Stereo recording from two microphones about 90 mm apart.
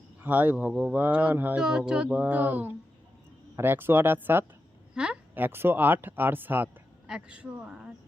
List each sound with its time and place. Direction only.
0.2 s speech: 20° right (ahead or behind)
1.6 s speech: 10° right (ahead or behind)
5.0 s a sound: 10° right (ahead or behind)
5.3 s speech: 25° right (ahead or behind); by 7.9 s 5° right (ahead or behind)